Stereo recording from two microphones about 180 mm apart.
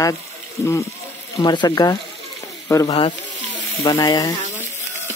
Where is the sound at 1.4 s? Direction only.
25° left (ahead or behind).